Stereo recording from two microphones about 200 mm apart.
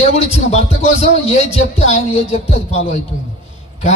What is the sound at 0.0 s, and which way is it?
Speech, 35° left (ahead or behind).